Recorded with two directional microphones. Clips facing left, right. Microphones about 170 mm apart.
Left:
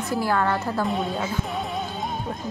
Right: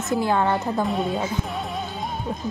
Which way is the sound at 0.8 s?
Centre (ahead or behind).